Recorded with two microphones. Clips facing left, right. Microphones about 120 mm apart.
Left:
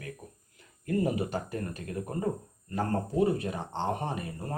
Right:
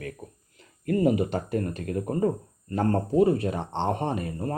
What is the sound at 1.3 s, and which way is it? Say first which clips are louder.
Speech: right 6 dB; 65° right (ahead or behind).